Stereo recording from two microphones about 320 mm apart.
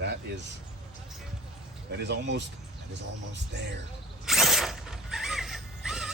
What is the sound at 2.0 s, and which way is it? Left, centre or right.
Speech, right.